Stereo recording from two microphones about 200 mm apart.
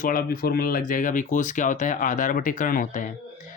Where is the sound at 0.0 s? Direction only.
45° left (ahead or behind).